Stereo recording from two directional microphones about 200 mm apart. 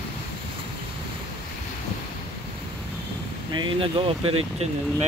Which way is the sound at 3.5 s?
25° right (ahead or behind).